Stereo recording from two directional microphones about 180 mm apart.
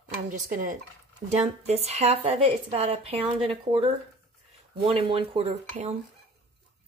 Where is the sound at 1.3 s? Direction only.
35° right (ahead or behind).